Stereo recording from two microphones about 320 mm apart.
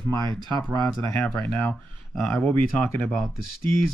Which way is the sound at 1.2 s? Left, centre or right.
Centre.